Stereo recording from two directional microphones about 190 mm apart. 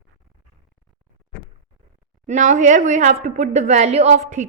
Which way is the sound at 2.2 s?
40° right (ahead or behind).